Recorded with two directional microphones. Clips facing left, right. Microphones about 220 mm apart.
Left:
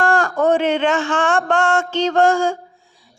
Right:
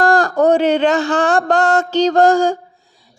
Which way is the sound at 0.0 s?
35° right (ahead or behind).